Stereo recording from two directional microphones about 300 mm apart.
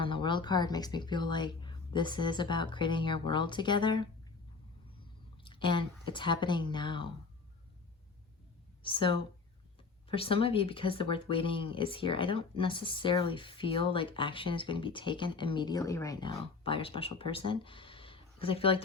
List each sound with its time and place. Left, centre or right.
0.0 s speech: centre
5.4 s speech: centre
8.8 s a woman's voice: centre